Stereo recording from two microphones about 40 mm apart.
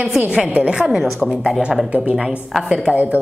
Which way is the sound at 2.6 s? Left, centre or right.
Centre.